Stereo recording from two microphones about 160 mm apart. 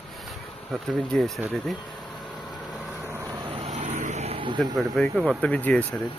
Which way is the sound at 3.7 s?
45° right (ahead or behind).